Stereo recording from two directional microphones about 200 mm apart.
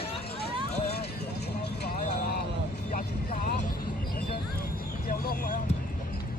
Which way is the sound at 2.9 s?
45° left (ahead or behind).